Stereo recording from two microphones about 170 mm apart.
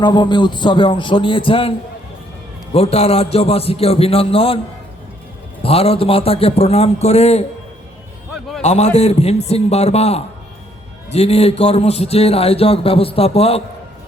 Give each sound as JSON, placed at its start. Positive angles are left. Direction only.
{"t": 0.0, "sound": "a man's voice", "side_deg": 25}
{"t": 2.7, "sound": "a man's voice", "side_deg": 35}
{"t": 5.6, "sound": "a man's voice", "side_deg": 35}
{"t": 8.6, "sound": "a man's voice", "side_deg": 40}